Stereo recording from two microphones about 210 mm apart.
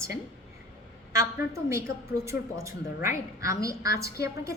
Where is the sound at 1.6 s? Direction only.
15° right (ahead or behind).